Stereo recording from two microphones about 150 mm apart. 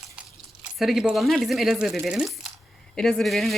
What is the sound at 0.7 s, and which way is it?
Speech, centre (ahead or behind).